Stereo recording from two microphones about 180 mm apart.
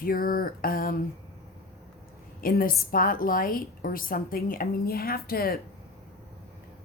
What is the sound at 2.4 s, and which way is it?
A woman's voice, 55° left (ahead or behind).